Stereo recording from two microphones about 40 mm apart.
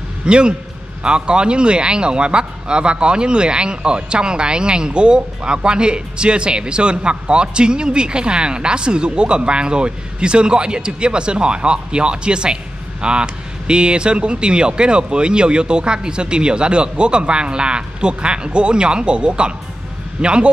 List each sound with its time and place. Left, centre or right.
0.2 s a man's voice: right